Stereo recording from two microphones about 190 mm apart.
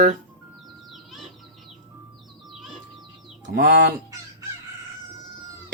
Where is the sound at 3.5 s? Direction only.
60° right (ahead or behind).